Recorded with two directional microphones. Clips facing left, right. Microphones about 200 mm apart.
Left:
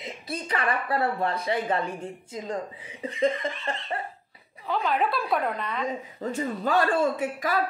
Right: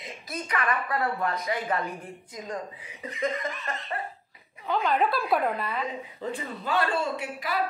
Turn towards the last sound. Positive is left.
turn(degrees=50)  # may be behind; listen again after turning